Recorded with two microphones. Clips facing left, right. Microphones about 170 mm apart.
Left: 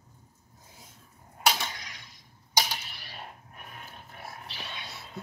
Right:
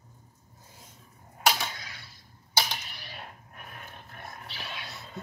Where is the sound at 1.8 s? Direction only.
15° left (ahead or behind).